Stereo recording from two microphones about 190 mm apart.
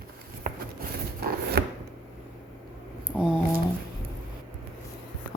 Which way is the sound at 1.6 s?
55° right (ahead or behind).